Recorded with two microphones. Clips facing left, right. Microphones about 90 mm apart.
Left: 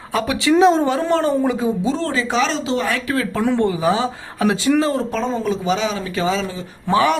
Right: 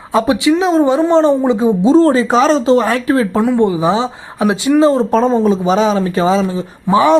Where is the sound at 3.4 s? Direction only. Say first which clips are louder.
Right 5 dB; 15° right (ahead or behind).